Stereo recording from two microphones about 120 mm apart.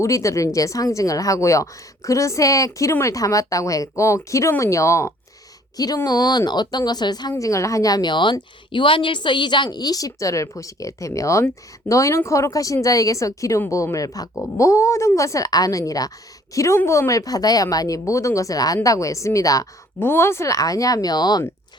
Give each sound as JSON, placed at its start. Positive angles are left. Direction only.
{"t": 0.0, "sound": "speech", "side_deg": 25}